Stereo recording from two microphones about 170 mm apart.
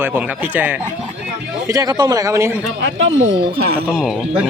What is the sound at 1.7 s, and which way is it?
Speech, 20° right (ahead or behind).